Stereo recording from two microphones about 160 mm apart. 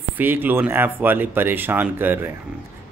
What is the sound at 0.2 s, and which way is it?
Speech, 10° right (ahead or behind).